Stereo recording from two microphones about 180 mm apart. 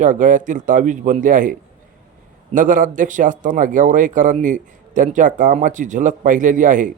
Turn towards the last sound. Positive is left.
turn(degrees=-45)  # may be behind; listen again after turning